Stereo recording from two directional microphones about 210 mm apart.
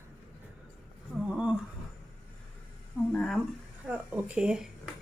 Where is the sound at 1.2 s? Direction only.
5° right (ahead or behind).